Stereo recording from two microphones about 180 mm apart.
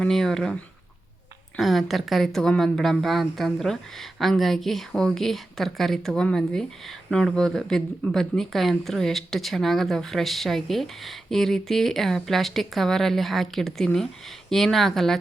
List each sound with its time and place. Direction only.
0.0 s a woman's voice: centre (ahead or behind)